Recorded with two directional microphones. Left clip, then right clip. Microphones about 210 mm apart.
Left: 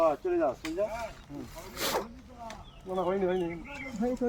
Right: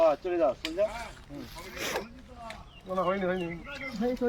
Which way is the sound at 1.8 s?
15° left (ahead or behind).